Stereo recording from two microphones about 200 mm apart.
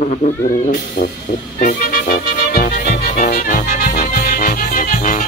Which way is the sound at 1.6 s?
45° left (ahead or behind).